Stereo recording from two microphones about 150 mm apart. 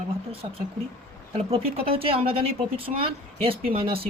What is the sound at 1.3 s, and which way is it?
Speech, 40° right (ahead or behind).